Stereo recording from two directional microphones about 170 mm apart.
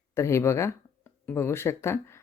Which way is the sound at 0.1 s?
15° left (ahead or behind).